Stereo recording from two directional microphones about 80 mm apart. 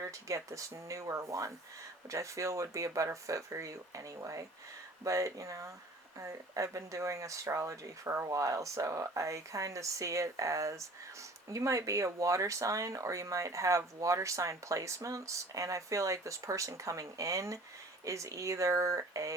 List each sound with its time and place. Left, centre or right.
0.0 s speech: right